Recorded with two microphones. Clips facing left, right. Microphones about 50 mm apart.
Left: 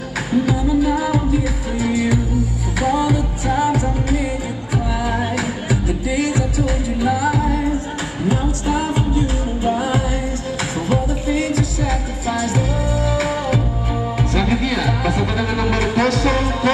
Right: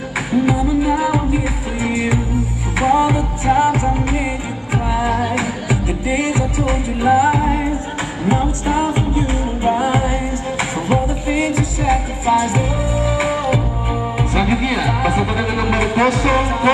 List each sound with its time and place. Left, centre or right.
0.5 s music: right